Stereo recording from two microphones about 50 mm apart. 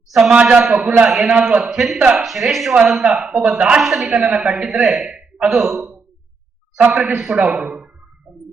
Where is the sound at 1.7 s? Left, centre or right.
Centre.